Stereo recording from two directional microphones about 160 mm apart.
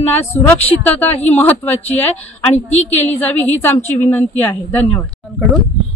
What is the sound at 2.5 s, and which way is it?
Speech, 45° left (ahead or behind).